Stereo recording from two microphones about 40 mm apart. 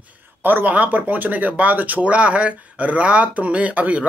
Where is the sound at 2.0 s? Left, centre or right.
Right.